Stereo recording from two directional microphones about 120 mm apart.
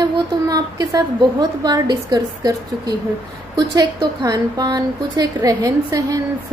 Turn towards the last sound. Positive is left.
turn(degrees=-30)  # may be behind; listen again after turning